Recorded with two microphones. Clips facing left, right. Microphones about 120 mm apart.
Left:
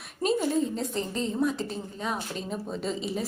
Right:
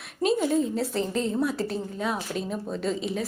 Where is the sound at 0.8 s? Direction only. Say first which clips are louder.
Right 4 dB; centre (ahead or behind).